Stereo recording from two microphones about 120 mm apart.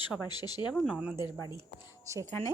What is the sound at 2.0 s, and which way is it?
Speech, 25° right (ahead or behind).